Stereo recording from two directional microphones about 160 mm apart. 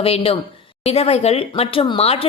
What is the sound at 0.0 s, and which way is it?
Speech, 35° left (ahead or behind).